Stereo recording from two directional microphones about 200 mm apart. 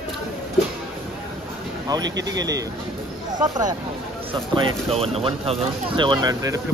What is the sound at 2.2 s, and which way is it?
Speech, 15° right (ahead or behind).